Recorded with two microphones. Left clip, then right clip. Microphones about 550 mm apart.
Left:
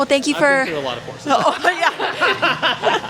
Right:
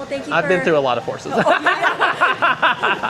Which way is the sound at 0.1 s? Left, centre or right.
Left.